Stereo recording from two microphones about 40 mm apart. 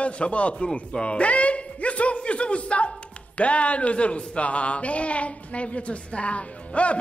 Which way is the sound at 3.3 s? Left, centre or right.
Left.